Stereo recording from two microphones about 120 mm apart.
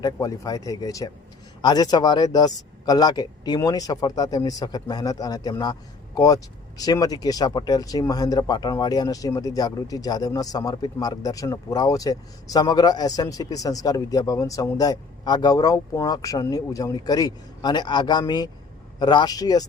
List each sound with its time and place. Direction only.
0.0 s a man's voice: 30° left (ahead or behind)